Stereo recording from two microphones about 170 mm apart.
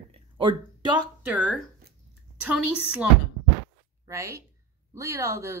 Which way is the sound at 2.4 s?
5° right (ahead or behind).